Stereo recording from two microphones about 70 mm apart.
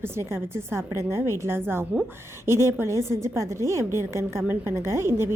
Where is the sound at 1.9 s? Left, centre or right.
Centre.